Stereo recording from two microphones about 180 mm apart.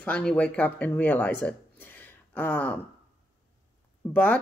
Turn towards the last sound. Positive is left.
turn(degrees=10)  # may be behind; listen again after turning